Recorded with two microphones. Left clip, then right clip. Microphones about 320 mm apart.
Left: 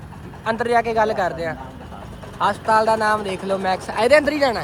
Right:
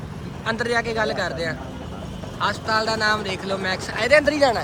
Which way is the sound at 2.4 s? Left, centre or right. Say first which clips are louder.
Left 5 dB; centre.